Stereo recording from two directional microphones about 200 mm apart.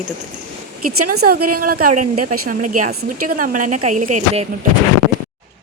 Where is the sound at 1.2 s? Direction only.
50° right (ahead or behind).